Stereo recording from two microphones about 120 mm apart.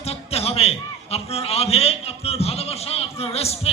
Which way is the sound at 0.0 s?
60° left (ahead or behind).